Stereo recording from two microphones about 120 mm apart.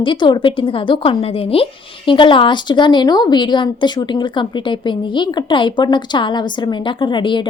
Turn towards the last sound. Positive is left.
turn(degrees=40)  # may be behind; listen again after turning